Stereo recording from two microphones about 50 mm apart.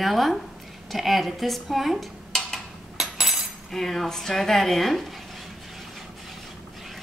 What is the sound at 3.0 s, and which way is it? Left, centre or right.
Cutlery, centre.